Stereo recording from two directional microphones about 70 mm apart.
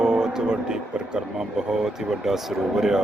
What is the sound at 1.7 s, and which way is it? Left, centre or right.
Speech, centre.